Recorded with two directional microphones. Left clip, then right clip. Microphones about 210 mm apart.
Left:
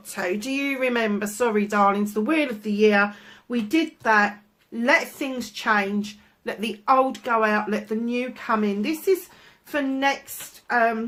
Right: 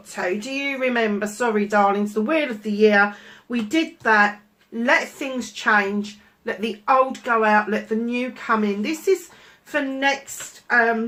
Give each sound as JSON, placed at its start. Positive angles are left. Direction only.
{"t": 0.2, "sound": "speech", "side_deg": 45}